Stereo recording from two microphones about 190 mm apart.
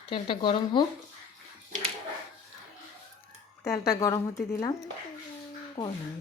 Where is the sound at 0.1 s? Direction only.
25° left (ahead or behind).